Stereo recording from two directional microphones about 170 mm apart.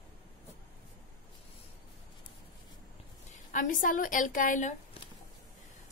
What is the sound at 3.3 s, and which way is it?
A woman's voice, 50° left (ahead or behind).